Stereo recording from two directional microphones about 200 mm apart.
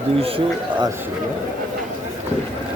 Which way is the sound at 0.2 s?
25° right (ahead or behind).